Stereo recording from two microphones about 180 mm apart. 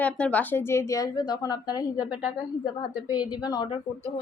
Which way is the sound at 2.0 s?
5° right (ahead or behind).